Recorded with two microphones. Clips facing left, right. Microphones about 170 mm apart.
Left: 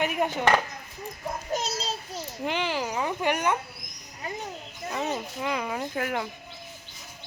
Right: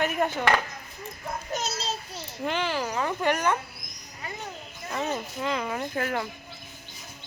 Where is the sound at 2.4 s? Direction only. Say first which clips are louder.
Right 1 dB; 15° left (ahead or behind).